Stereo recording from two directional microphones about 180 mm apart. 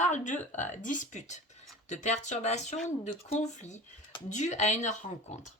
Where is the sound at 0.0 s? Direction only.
40° left (ahead or behind).